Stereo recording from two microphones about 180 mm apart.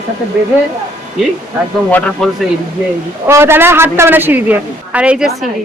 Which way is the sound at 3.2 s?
15° right (ahead or behind).